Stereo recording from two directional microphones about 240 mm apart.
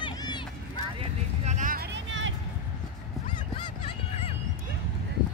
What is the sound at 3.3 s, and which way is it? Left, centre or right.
Honk, left.